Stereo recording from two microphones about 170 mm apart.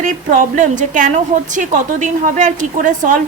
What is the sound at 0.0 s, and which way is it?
A woman's voice, 50° right (ahead or behind).